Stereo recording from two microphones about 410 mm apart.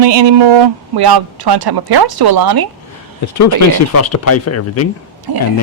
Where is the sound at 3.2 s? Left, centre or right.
Left.